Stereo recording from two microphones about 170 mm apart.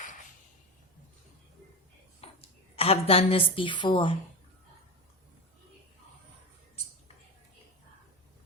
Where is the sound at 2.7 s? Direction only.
35° left (ahead or behind).